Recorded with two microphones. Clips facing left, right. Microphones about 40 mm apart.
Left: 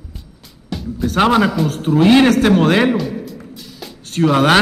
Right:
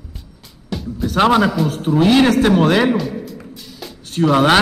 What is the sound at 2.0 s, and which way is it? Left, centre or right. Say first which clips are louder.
Speech: left 2 dB; centre.